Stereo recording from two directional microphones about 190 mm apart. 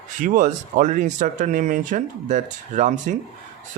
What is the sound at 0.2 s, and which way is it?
Speech, 45° right (ahead or behind).